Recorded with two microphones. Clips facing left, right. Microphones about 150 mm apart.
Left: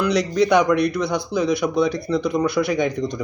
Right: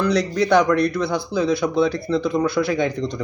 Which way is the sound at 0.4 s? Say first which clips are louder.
Even; centre (ahead or behind).